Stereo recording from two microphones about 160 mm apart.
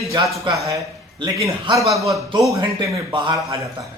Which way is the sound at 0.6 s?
25° right (ahead or behind).